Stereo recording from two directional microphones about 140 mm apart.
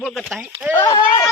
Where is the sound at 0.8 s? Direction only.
30° left (ahead or behind).